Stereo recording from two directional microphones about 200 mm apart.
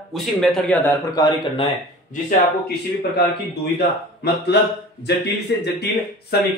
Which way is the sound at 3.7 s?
55° left (ahead or behind).